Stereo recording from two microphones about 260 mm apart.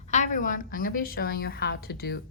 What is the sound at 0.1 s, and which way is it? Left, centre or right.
A woman's voice, left.